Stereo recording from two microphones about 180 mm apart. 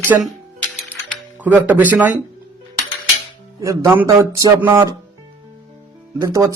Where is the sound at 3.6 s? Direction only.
15° right (ahead or behind).